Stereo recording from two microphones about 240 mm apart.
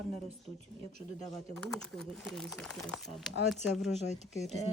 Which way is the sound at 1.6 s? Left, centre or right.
Centre.